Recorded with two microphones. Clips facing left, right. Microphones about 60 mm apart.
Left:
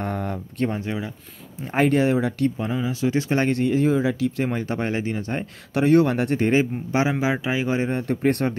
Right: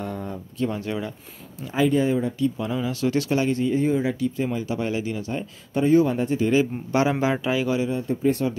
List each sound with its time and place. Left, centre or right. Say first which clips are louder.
0.0 s a sound: left 3 dB; left
0.7 s speech: right 1 dB; left
1.7 s speech: left 2 dB; left
2.6 s speech: left 1 dB; left
3.3 s speech: left 1 dB; left
3.6 s speech: left 2 dB; left
4.5 s speech: left 1 dB; left
5.8 s speech: left 1 dB; left
6.5 s speech: even; left
7.8 s speech: left 1 dB; left